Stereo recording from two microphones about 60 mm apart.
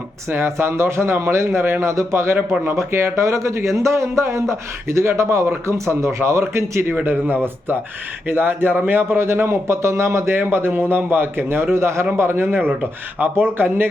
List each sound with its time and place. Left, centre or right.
0.3 s a man's voice: right
1.5 s a man's voice: right
2.3 s a man's voice: right
2.7 s a man's voice: right
6.9 s a man's voice: right
10.3 s a man's voice: right